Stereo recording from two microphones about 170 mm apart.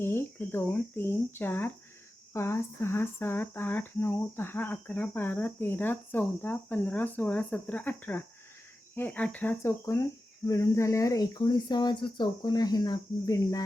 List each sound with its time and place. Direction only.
0.0 s speech: 15° left (ahead or behind)